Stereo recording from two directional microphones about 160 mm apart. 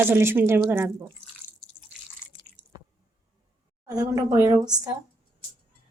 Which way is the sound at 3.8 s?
20° right (ahead or behind).